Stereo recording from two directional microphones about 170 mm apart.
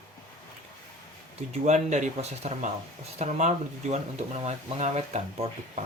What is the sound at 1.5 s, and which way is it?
Speech, 45° right (ahead or behind).